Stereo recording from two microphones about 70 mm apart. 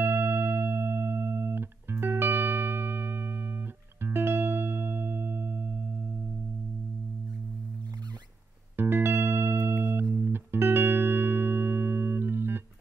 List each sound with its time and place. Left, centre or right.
0.0 s music: right
8.7 s music: right